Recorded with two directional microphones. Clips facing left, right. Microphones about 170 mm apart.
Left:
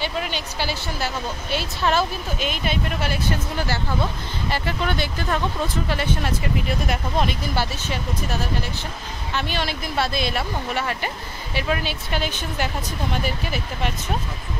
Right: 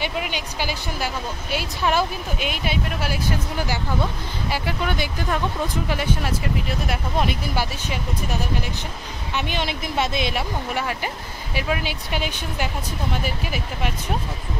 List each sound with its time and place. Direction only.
0.0 s speech: 10° right (ahead or behind)